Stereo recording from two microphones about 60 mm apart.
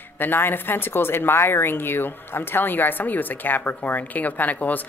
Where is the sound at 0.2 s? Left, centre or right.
Left.